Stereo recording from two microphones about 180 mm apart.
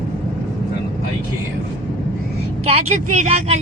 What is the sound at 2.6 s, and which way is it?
Speech, 40° right (ahead or behind).